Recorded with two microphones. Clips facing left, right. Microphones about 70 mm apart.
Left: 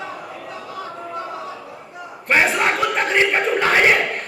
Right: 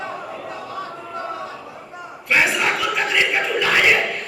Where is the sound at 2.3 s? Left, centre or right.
Left.